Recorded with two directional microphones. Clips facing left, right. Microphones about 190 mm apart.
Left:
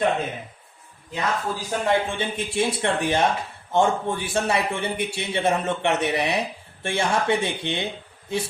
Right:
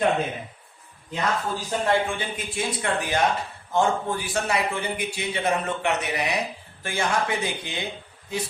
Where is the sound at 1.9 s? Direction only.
25° left (ahead or behind).